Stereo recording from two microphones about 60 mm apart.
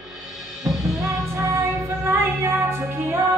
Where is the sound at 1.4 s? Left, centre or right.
Right.